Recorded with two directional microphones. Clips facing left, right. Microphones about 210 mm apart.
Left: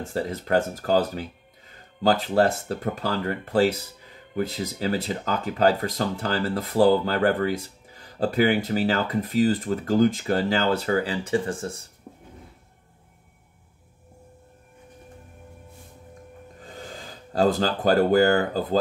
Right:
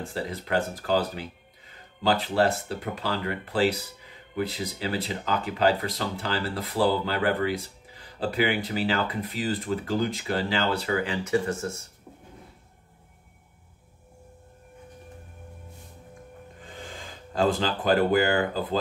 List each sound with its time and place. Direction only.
0.1 s speech: 45° left (ahead or behind)
16.6 s speech: 40° left (ahead or behind)